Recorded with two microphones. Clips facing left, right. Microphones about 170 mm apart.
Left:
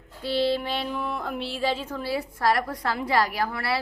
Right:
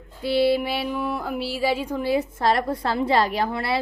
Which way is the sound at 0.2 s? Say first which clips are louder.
Right 4 dB; 10° right (ahead or behind).